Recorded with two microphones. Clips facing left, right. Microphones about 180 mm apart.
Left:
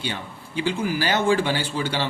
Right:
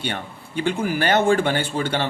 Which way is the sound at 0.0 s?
60° right (ahead or behind).